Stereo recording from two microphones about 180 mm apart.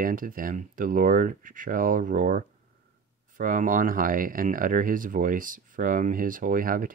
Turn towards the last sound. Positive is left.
turn(degrees=-50)  # may be behind; listen again after turning